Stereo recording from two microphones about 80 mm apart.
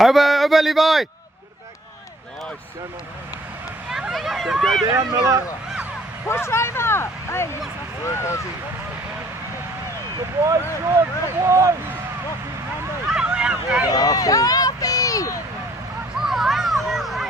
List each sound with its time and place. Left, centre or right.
0.0 s a sound: centre
3.9 s speech: centre
6.2 s speech: left
10.4 s speech: right
13.1 s vehicle: centre
13.8 s speech: left
16.2 s speech: centre